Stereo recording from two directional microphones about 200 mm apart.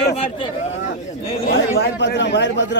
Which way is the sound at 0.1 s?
30° left (ahead or behind).